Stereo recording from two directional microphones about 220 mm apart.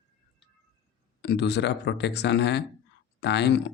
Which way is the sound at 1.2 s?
50° left (ahead or behind).